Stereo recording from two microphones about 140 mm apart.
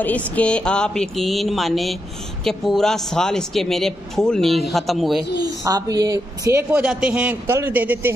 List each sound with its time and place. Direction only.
0.0 s speech: 10° left (ahead or behind)
5.4 s a woman's voice: 25° right (ahead or behind)
6.7 s a man's voice: 5° right (ahead or behind)